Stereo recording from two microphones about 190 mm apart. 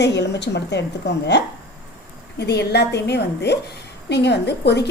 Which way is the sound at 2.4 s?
60° left (ahead or behind).